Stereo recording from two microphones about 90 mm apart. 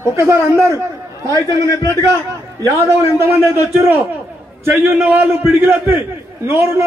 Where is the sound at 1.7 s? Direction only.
40° left (ahead or behind).